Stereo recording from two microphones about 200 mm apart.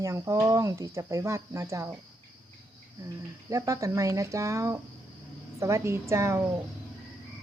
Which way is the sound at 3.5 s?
15° right (ahead or behind).